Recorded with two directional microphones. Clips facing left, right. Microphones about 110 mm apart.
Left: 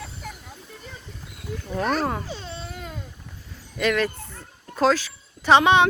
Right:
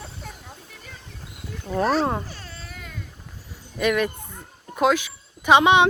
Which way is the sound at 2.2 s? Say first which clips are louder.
Left 6 dB; 20° left (ahead or behind).